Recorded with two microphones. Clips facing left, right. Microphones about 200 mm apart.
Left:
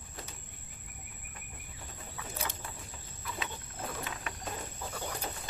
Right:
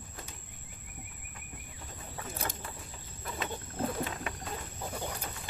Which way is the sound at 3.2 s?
45° right (ahead or behind).